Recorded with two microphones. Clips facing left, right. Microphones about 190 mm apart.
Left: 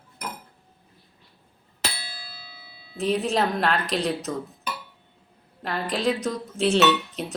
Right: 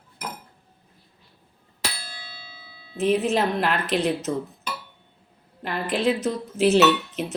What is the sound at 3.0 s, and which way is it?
Speech, 5° right (ahead or behind).